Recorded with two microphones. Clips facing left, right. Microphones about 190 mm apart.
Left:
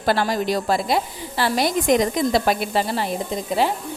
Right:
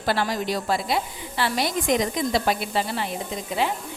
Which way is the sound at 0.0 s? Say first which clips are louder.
Left 4 dB; 45° left (ahead or behind).